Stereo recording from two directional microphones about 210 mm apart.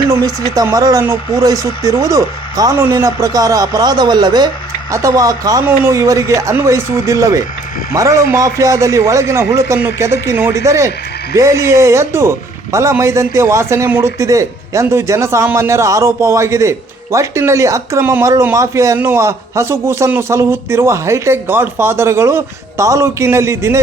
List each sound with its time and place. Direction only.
0.5 s speech: 15° right (ahead or behind)